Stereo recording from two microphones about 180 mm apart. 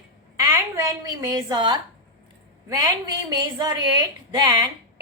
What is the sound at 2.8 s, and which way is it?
A woman's voice, 20° right (ahead or behind).